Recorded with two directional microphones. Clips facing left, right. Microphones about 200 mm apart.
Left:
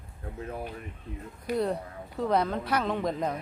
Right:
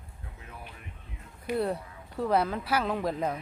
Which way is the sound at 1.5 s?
5° right (ahead or behind).